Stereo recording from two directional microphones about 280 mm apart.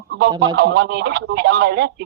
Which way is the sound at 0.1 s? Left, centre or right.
Right.